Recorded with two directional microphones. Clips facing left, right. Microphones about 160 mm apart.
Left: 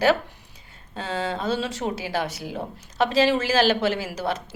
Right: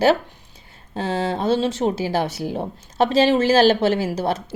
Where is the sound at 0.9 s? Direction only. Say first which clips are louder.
Right 5 dB; 30° right (ahead or behind).